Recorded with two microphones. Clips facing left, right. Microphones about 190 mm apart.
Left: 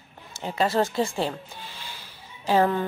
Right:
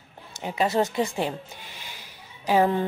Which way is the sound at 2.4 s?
15° right (ahead or behind).